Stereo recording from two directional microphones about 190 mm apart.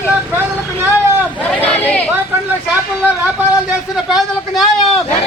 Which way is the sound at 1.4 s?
5° left (ahead or behind).